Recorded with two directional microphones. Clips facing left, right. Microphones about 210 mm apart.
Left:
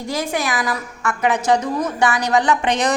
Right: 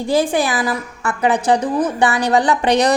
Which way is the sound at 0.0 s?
30° right (ahead or behind).